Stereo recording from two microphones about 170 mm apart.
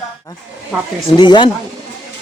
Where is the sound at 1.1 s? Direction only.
25° left (ahead or behind).